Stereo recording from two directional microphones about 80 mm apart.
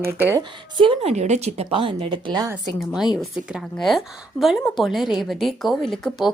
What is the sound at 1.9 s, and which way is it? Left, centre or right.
Speech, right.